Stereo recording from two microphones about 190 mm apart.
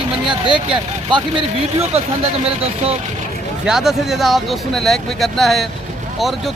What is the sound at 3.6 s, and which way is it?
Speech, centre (ahead or behind).